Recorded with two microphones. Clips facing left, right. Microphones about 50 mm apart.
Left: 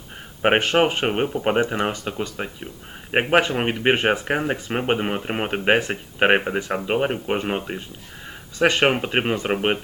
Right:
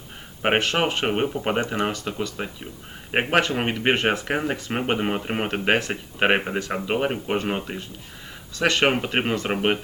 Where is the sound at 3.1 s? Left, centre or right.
Centre.